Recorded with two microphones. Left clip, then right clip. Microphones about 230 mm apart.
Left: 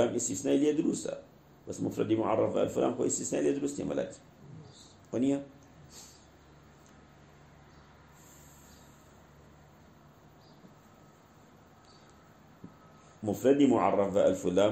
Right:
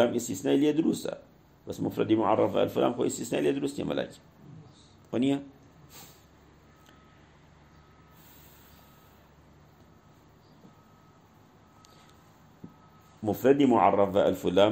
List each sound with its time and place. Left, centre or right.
0.0 s speech: right
5.1 s speech: right
13.2 s speech: right